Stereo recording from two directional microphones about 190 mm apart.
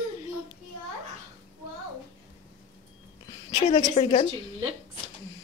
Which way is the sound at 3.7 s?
30° left (ahead or behind).